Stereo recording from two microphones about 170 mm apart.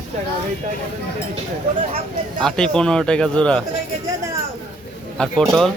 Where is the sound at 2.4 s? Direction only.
5° left (ahead or behind).